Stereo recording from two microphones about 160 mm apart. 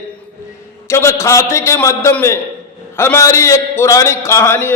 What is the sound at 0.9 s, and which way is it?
A man's voice, 15° left (ahead or behind).